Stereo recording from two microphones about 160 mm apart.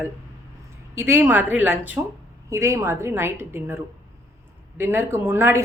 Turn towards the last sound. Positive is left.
turn(degrees=-15)  # may be behind; listen again after turning